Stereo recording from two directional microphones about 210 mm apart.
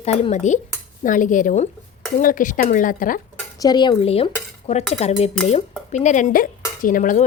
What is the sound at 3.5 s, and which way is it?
Cutlery, 20° left (ahead or behind).